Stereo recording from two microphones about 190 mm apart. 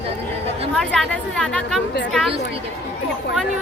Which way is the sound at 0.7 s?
5° left (ahead or behind).